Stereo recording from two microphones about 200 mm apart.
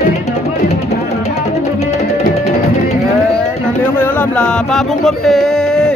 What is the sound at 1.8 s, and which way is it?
Music, 35° left (ahead or behind).